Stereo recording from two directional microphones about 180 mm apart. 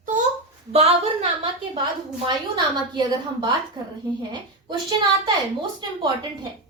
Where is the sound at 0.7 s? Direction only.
35° right (ahead or behind).